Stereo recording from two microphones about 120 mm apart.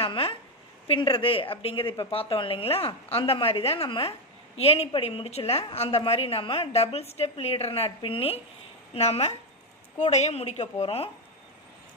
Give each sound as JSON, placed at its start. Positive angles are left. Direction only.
{"t": 0.0, "sound": "a woman's voice", "side_deg": 45}